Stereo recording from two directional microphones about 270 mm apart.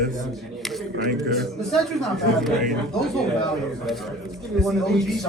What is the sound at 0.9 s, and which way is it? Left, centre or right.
Speech, right.